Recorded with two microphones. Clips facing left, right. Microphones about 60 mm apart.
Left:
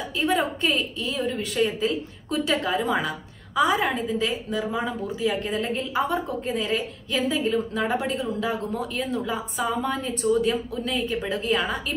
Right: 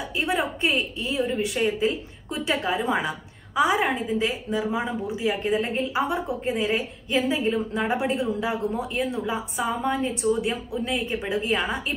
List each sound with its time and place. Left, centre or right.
0.3 s a woman's voice: centre
0.7 s a woman's voice: right